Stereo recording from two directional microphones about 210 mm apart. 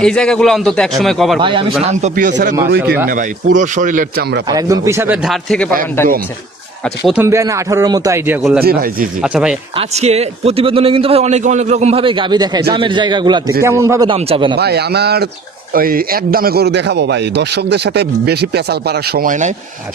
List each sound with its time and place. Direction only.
0.0 s a man's voice: 5° left (ahead or behind)
1.4 s a man's voice: 25° right (ahead or behind)
2.8 s a man's voice: 5° right (ahead or behind)
3.1 s speech: 40° right (ahead or behind)
4.4 s a man's voice: 15° right (ahead or behind); by 6.1 s 10° left (ahead or behind)
6.8 s a man's voice: centre (ahead or behind)
8.4 s a man's voice: centre (ahead or behind)
8.6 s a man's voice: 45° right (ahead or behind)
9.2 s a man's voice: 5° right (ahead or behind)
9.7 s a man's voice: 30° right (ahead or behind); by 14.1 s 15° right (ahead or behind)
14.1 s a man's voice: 25° right (ahead or behind)
14.5 s a man's voice: 50° right (ahead or behind)